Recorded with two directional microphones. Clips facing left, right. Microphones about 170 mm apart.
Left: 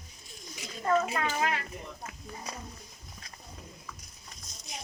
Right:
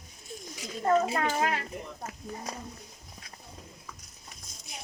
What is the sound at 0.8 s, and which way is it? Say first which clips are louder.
Speech: right 2 dB; 30° right (ahead or behind).